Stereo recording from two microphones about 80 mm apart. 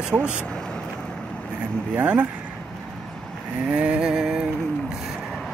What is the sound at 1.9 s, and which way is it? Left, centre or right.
Speech, centre.